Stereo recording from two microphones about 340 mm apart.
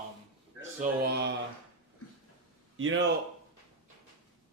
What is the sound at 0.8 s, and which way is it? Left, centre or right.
Speech, right.